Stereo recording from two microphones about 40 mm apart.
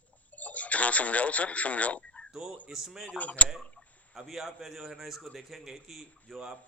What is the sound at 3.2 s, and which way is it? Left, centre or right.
Speech, left.